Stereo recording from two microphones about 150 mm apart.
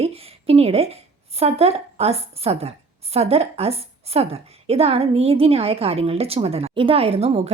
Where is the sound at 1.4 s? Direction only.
45° right (ahead or behind).